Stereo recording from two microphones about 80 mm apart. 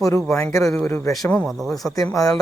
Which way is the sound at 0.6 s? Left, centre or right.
Centre.